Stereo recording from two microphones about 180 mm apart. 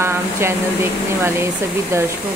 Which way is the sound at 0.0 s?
15° right (ahead or behind).